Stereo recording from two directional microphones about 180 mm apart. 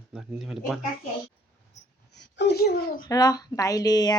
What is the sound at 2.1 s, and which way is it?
Speech, 70° left (ahead or behind).